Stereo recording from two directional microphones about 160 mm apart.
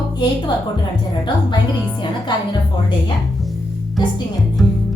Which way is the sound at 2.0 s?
30° left (ahead or behind).